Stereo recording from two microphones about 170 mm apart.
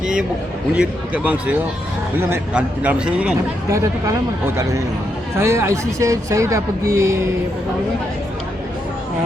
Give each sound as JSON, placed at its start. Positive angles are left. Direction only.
{"t": 0.7, "sound": "speech", "side_deg": -10}
{"t": 3.7, "sound": "speech", "side_deg": -15}
{"t": 5.4, "sound": "speech", "side_deg": -15}